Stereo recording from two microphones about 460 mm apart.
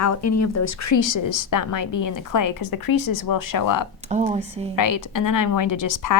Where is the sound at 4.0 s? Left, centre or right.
Centre.